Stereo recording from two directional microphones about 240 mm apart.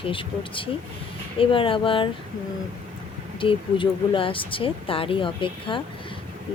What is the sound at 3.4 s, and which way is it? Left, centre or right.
Speech, left.